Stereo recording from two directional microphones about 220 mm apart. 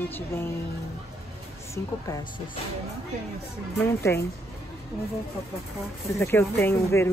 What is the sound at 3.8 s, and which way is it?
Speech, 10° left (ahead or behind).